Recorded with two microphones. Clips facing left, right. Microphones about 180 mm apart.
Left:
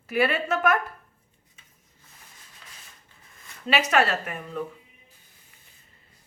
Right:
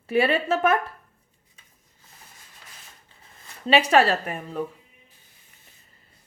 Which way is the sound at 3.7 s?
30° right (ahead or behind).